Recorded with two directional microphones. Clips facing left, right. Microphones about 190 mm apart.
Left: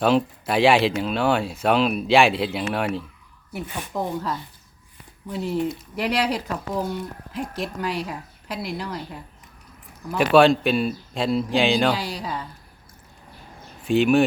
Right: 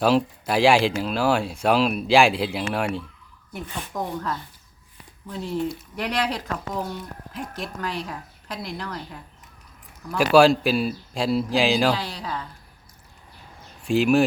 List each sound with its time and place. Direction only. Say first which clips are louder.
0.0 s a woman's voice: even; centre (ahead or behind)
10.1 s speech: even; centre (ahead or behind)
11.9 s a woman's voice: left 2 dB; 10° left (ahead or behind)
13.8 s speech: left 1 dB; centre (ahead or behind)